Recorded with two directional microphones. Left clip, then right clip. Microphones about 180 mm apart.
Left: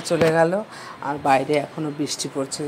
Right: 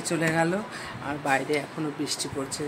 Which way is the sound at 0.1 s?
15° left (ahead or behind).